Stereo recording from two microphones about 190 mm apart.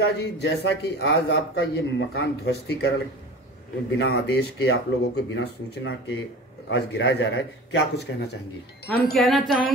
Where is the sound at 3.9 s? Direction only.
70° left (ahead or behind).